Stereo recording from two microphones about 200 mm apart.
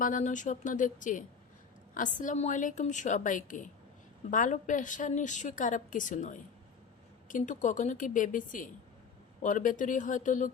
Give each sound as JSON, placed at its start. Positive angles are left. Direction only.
{"t": 0.0, "sound": "a woman's voice", "side_deg": 40}